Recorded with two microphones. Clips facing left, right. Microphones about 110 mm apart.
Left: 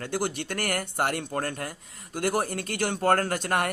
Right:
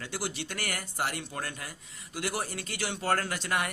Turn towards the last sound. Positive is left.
turn(degrees=50)  # may be behind; listen again after turning